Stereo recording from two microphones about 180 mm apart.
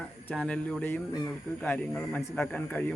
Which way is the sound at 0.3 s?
5° left (ahead or behind).